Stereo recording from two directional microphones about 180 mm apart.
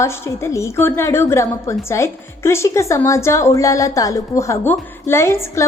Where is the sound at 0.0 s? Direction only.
15° left (ahead or behind).